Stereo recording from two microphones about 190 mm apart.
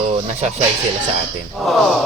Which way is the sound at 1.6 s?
Centre (ahead or behind).